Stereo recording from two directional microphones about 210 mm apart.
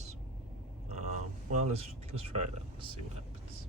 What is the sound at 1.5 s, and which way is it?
Speech, 30° right (ahead or behind).